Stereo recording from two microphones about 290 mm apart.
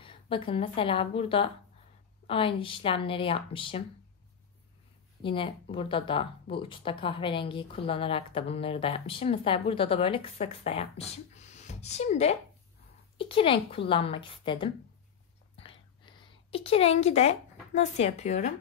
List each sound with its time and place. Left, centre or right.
0.0 s a woman's voice: centre
5.2 s speech: centre
15.5 s a sound: centre